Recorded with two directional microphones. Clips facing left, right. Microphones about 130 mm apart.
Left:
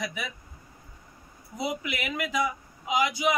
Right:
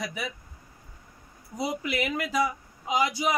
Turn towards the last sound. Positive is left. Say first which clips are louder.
# even
turn(degrees=-35)  # may be behind; listen again after turning